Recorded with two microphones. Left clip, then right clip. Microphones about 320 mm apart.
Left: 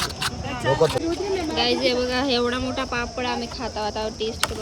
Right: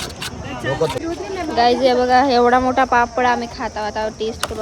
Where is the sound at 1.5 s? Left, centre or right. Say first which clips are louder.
Right 9 dB; centre.